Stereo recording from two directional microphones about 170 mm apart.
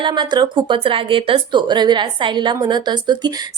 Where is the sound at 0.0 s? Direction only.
25° right (ahead or behind).